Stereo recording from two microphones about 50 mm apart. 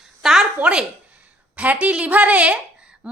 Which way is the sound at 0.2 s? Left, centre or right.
Centre.